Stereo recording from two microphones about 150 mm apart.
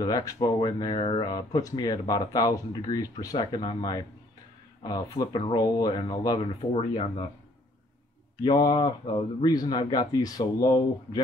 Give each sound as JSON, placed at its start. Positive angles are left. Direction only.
{"t": 0.0, "sound": "speech", "side_deg": 25}
{"t": 8.4, "sound": "speech", "side_deg": 25}